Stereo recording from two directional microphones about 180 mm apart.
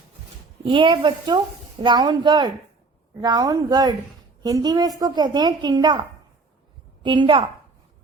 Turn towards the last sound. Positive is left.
turn(degrees=-25)  # may be behind; listen again after turning